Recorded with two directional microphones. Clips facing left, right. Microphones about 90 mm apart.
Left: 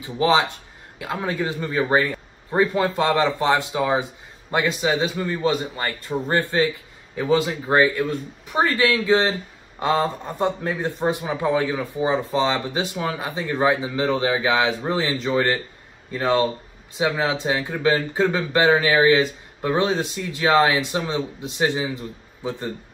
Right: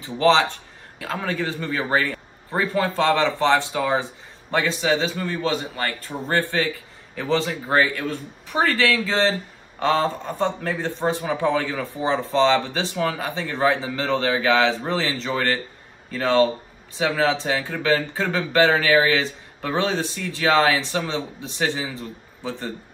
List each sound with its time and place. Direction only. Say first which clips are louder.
0.0 s a man's voice: right 1 dB; 15° left (ahead or behind)